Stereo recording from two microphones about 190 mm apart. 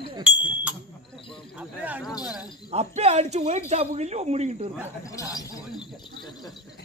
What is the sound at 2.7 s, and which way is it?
Speech, 35° right (ahead or behind).